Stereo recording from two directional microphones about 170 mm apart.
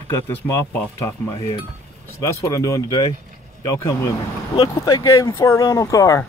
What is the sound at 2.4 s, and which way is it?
Speech, 15° left (ahead or behind).